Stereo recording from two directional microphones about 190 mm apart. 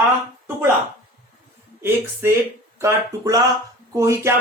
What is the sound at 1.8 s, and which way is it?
Speech, 10° right (ahead or behind).